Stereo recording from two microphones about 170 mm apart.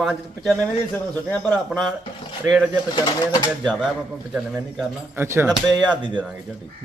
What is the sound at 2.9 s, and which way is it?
Speech, 20° left (ahead or behind).